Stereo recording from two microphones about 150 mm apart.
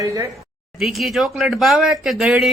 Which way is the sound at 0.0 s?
20° right (ahead or behind).